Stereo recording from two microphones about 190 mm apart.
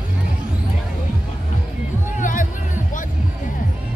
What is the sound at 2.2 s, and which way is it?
Music, 45° left (ahead or behind).